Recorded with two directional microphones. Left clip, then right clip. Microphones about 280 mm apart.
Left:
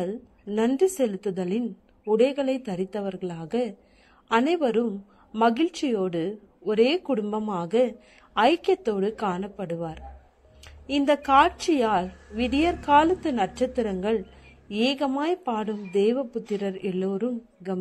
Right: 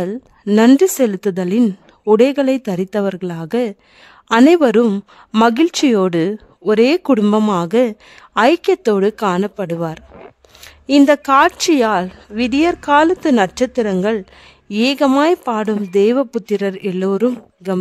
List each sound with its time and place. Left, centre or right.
0.0 s a woman's voice: right